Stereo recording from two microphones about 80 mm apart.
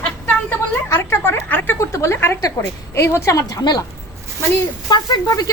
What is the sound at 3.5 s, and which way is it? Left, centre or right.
Speech, left.